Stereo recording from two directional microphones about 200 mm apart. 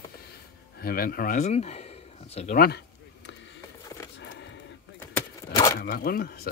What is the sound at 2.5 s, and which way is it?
Speech, 50° left (ahead or behind).